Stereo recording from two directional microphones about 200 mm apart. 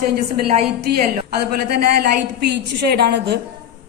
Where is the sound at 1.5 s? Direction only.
50° right (ahead or behind).